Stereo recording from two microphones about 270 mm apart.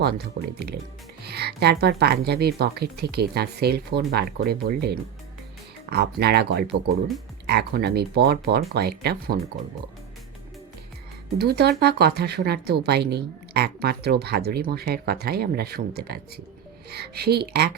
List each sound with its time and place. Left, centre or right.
1.2 s speech: right
11.3 s speech: right